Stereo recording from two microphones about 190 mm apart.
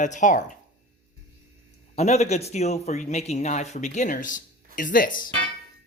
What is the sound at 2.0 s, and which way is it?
Speech, 35° left (ahead or behind).